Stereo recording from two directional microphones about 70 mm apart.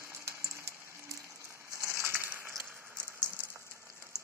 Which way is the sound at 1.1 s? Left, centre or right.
Right.